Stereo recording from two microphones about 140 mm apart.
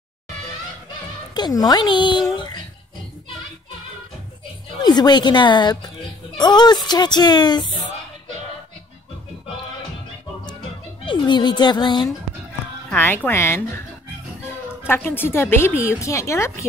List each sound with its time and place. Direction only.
1.3 s speech: 30° left (ahead or behind)
4.8 s speech: 30° left (ahead or behind)
11.1 s speech: 30° left (ahead or behind)
12.9 s speech: 15° left (ahead or behind)
14.9 s a woman's voice: 15° left (ahead or behind)